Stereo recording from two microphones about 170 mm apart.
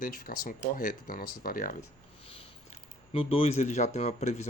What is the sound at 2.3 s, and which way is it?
Speech, 35° left (ahead or behind).